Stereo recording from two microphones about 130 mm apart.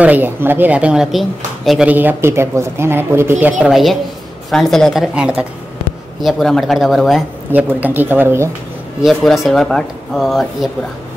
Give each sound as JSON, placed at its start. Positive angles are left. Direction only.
{"t": 0.0, "sound": "speech", "side_deg": -15}
{"t": 1.9, "sound": "speech", "side_deg": -15}
{"t": 3.5, "sound": "speech", "side_deg": 0}
{"t": 7.5, "sound": "speech", "side_deg": -15}
{"t": 9.0, "sound": "speech", "side_deg": 0}